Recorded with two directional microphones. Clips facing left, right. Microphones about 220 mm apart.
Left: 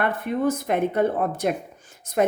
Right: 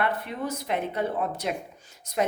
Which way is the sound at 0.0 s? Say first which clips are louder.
Left 6 dB; 50° left (ahead or behind).